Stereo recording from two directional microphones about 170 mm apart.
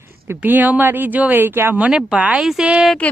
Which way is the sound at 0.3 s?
10° right (ahead or behind).